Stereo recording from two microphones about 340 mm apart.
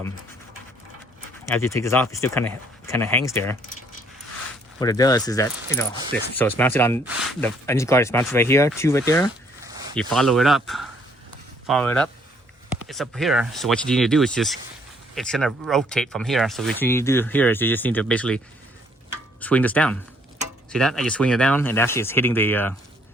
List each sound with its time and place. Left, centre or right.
1.5 s speech: centre
4.8 s speech: centre
19.4 s speech: centre